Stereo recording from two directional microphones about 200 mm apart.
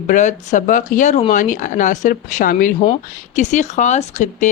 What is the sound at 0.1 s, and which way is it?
Speech, 40° left (ahead or behind).